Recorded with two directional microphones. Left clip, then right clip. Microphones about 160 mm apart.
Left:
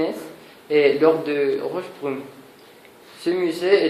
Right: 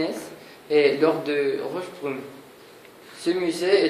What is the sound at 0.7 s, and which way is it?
Speech, 40° left (ahead or behind).